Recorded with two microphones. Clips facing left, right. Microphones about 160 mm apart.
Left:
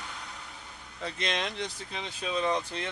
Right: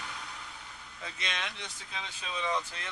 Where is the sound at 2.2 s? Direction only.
55° left (ahead or behind).